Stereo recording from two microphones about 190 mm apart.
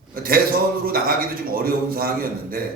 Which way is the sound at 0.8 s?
50° right (ahead or behind).